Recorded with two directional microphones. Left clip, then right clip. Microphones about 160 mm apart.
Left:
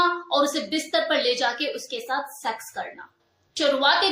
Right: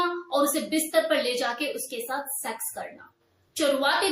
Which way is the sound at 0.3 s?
20° right (ahead or behind).